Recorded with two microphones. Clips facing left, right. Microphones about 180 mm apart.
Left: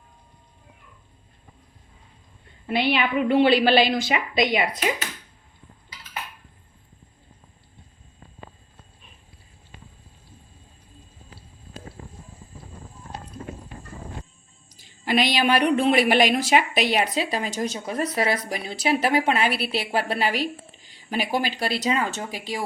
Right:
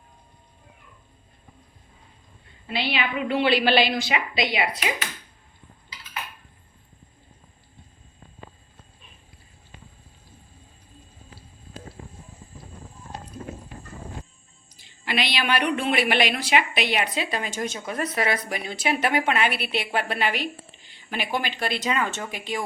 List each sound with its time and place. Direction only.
2.6 s a woman's voice: 50° left (ahead or behind)
14.8 s speech: 45° left (ahead or behind)